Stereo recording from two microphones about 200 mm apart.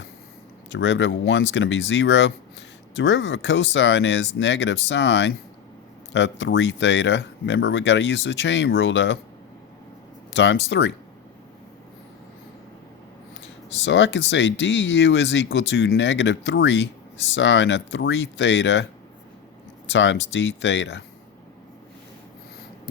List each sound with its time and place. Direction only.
0.7 s speech: 65° left (ahead or behind)
10.3 s speech: 65° left (ahead or behind)
13.8 s speech: 65° left (ahead or behind)
19.9 s speech: 65° left (ahead or behind)